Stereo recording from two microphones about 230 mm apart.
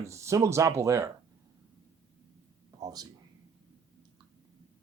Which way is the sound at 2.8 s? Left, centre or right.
Centre.